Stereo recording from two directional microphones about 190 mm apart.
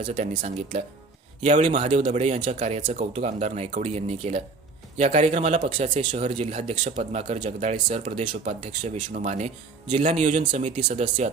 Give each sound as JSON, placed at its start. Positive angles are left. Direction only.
{"t": 0.1, "sound": "speech", "side_deg": -40}
{"t": 5.6, "sound": "speech", "side_deg": -30}
{"t": 10.7, "sound": "speech", "side_deg": -25}
{"t": 10.9, "sound": "speech", "side_deg": -40}